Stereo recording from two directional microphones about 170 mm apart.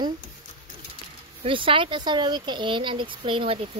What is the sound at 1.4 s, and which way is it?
Speech, 30° right (ahead or behind).